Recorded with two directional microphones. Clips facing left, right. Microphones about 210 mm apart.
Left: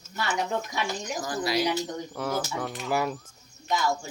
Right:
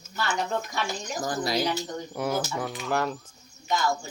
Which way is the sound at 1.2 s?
45° right (ahead or behind).